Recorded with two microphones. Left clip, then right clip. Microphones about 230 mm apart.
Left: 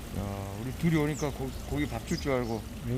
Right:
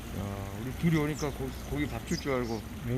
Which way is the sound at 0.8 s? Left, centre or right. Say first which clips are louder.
Left 1 dB; left.